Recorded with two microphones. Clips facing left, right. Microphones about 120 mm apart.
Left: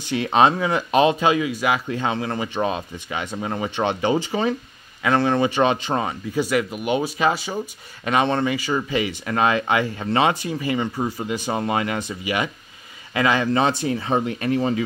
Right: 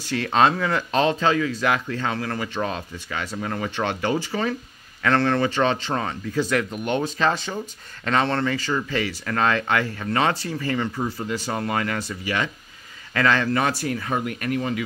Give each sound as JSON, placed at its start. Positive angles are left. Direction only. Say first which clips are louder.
{"t": 0.0, "sound": "speech", "louder": "left 2 dB", "side_deg": 15}